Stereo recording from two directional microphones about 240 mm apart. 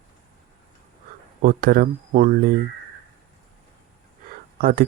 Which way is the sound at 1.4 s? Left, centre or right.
Right.